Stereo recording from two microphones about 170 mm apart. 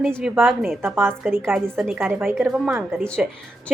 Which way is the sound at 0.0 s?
Centre (ahead or behind).